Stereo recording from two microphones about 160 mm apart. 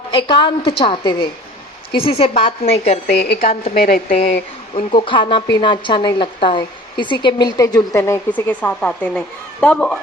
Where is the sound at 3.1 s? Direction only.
70° left (ahead or behind).